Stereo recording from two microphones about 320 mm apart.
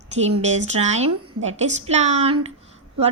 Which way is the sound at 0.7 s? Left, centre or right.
Right.